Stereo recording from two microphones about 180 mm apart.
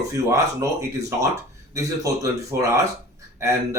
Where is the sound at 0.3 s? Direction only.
15° right (ahead or behind).